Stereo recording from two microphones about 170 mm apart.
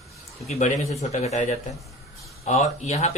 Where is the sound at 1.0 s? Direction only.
40° left (ahead or behind).